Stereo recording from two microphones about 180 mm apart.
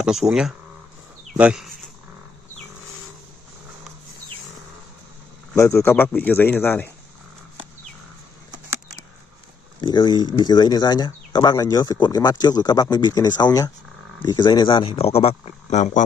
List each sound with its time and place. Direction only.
0.0 s speech: 5° right (ahead or behind)
5.6 s speech: 15° left (ahead or behind)
9.8 s speech: 25° left (ahead or behind); by 16.0 s 40° left (ahead or behind)